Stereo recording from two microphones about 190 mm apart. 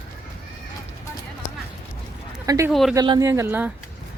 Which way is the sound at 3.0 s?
20° right (ahead or behind).